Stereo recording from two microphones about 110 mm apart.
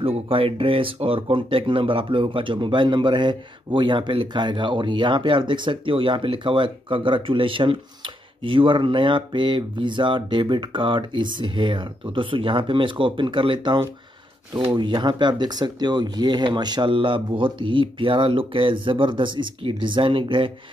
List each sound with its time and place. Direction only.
0.0 s speech: 60° right (ahead or behind)
14.8 s speech: 45° right (ahead or behind)